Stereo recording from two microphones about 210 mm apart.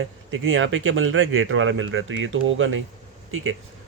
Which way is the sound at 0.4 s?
65° right (ahead or behind).